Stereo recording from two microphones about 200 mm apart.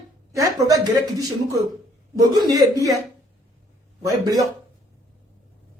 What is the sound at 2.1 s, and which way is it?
Speech, 20° right (ahead or behind).